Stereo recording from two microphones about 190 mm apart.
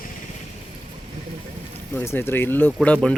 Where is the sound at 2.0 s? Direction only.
10° left (ahead or behind).